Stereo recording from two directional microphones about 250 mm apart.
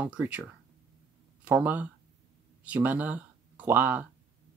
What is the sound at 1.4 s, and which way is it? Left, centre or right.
Speech, centre.